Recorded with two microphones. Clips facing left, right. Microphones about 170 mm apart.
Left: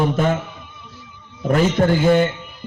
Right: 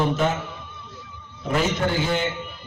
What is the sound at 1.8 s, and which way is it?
Speech, 45° left (ahead or behind).